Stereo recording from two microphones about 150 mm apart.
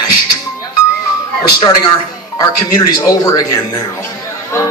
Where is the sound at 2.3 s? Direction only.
25° left (ahead or behind).